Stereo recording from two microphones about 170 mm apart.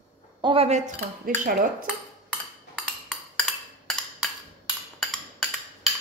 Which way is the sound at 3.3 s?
5° left (ahead or behind).